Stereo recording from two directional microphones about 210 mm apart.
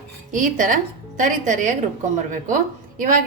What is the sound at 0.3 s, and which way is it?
A woman's voice, 40° right (ahead or behind).